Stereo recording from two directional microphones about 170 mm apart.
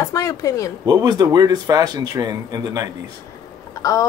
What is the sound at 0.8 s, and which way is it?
A man's voice, 25° right (ahead or behind).